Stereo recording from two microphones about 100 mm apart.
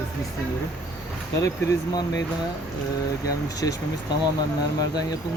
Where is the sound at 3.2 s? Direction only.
35° left (ahead or behind).